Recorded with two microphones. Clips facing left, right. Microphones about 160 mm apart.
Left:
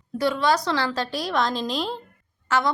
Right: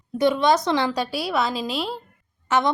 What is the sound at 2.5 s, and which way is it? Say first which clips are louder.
Speech: right 2 dB; 20° right (ahead or behind).